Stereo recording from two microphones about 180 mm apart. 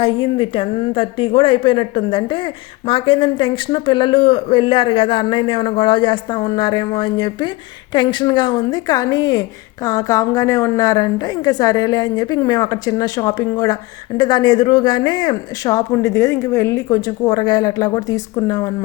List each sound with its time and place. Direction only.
0.0 s speech: 30° left (ahead or behind)